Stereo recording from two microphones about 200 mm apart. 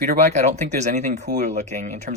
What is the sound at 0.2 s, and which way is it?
Speech, 35° right (ahead or behind).